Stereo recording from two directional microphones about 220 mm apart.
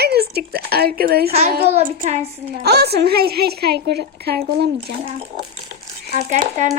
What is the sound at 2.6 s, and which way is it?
A woman's voice, 45° right (ahead or behind).